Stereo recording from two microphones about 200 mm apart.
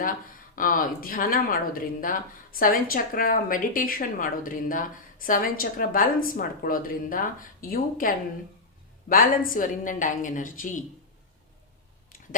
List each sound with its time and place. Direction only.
0.5 s a woman's voice: 45° left (ahead or behind)